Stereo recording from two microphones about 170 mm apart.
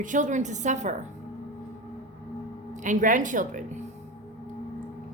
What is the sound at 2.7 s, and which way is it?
Speech, 50° right (ahead or behind).